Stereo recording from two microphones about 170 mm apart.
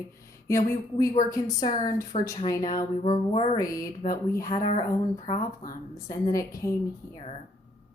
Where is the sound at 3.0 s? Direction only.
35° left (ahead or behind).